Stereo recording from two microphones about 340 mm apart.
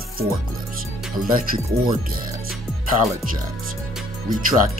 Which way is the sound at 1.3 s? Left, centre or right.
Right.